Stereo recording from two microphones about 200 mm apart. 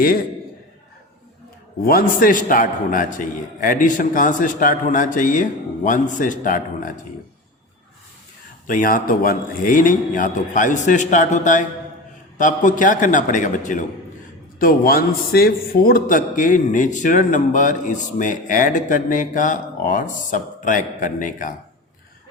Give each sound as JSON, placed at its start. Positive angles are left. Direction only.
{"t": 1.8, "sound": "a man's voice", "side_deg": 45}
{"t": 8.6, "sound": "a man's voice", "side_deg": 45}